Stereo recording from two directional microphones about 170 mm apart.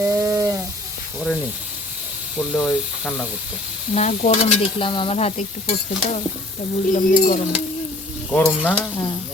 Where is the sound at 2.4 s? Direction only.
5° right (ahead or behind).